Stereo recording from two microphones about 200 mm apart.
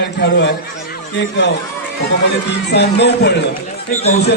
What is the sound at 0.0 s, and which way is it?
Speech, 60° left (ahead or behind).